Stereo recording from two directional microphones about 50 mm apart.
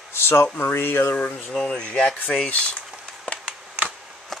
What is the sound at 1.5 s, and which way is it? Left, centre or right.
Speech, centre.